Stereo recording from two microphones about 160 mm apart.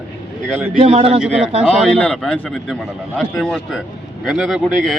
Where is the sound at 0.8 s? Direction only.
40° right (ahead or behind).